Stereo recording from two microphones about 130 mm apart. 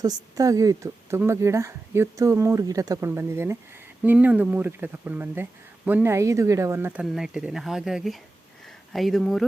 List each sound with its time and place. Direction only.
0.0 s a woman's voice: 30° right (ahead or behind)
7.0 s speech: 5° right (ahead or behind)